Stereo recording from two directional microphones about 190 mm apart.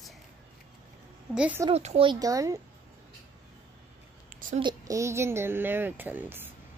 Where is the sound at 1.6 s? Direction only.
30° right (ahead or behind).